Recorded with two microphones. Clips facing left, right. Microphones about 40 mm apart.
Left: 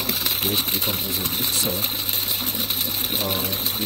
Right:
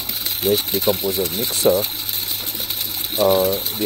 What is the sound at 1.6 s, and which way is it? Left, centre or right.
Speech, right.